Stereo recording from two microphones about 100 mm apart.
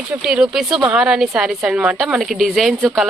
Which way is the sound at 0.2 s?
5° right (ahead or behind).